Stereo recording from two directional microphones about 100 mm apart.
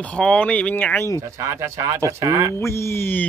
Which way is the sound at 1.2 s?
25° right (ahead or behind).